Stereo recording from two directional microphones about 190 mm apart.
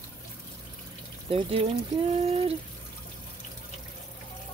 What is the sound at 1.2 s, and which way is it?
Speech, 30° right (ahead or behind).